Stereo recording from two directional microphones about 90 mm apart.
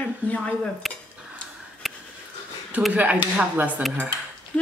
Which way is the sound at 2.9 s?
15° right (ahead or behind).